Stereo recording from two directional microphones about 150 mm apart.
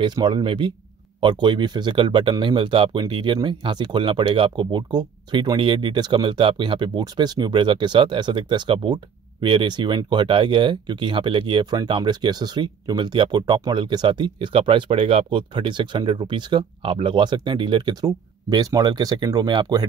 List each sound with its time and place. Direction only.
0.0 s speech: 30° right (ahead or behind)